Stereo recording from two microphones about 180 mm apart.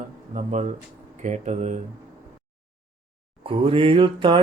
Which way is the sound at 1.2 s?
40° right (ahead or behind).